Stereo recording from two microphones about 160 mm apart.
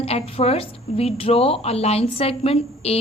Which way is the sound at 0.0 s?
40° left (ahead or behind).